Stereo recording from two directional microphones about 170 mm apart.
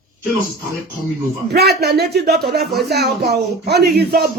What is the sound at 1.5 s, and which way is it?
Speech, 70° right (ahead or behind).